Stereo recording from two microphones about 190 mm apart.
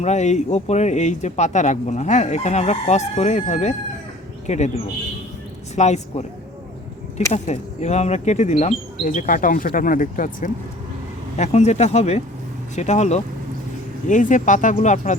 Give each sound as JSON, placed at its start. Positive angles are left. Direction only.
{"t": 0.0, "sound": "speech", "side_deg": 35}
{"t": 5.7, "sound": "speech", "side_deg": 35}
{"t": 7.3, "sound": "speech", "side_deg": 35}